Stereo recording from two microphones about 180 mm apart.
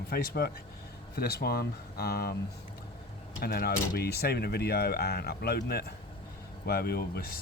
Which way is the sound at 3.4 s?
60° left (ahead or behind).